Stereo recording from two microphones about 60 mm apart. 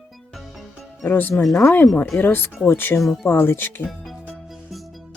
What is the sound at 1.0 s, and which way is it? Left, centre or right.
Speech, left.